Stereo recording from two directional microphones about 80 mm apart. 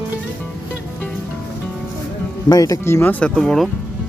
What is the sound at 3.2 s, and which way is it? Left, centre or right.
Speech, centre.